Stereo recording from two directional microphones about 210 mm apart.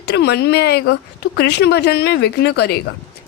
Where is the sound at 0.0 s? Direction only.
55° left (ahead or behind).